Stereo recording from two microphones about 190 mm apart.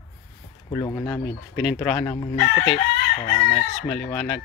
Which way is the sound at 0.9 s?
10° left (ahead or behind).